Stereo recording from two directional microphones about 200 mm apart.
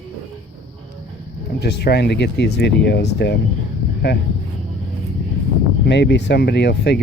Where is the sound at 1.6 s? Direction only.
55° left (ahead or behind).